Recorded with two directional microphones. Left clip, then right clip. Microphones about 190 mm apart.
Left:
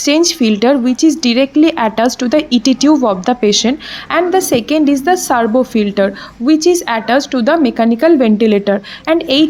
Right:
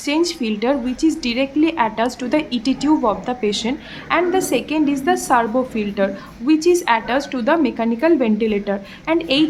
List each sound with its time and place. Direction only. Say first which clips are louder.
0.0 s speech: left 8 dB; 35° left (ahead or behind)